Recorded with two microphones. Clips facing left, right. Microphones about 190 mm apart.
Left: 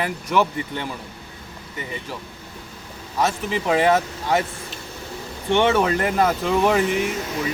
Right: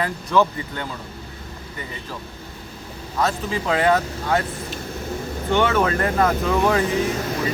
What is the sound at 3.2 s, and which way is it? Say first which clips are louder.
Speech: left 1 dB; 15° left (ahead or behind).